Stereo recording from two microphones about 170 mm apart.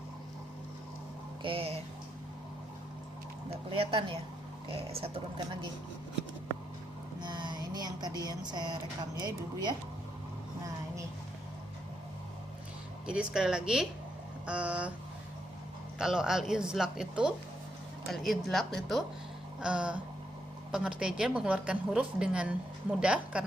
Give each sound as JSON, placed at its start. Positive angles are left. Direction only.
{"t": 1.4, "sound": "speech", "side_deg": -30}
{"t": 3.7, "sound": "speech", "side_deg": -35}
{"t": 7.2, "sound": "speech", "side_deg": -25}
{"t": 13.1, "sound": "a woman's voice", "side_deg": -5}
{"t": 14.4, "sound": "a sound", "side_deg": -5}
{"t": 16.0, "sound": "a woman's voice", "side_deg": -5}
{"t": 19.5, "sound": "music", "side_deg": -5}
{"t": 20.7, "sound": "a woman's voice", "side_deg": -5}